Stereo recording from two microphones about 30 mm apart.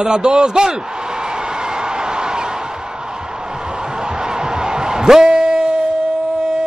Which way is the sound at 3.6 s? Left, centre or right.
Right.